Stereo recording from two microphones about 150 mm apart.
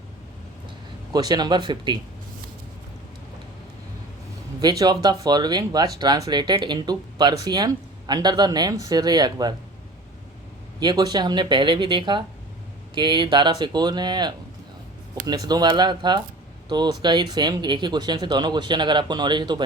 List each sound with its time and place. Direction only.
1.1 s speech: 30° right (ahead or behind)
4.6 s speech: 25° right (ahead or behind)
10.8 s speech: 30° right (ahead or behind)